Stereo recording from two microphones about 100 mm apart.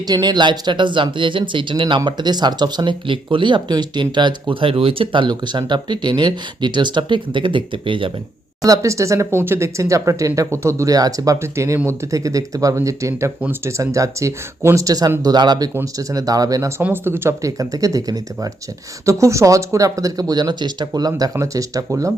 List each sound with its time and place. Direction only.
0.1 s speech: 45° right (ahead or behind)
8.6 s speech: 35° right (ahead or behind)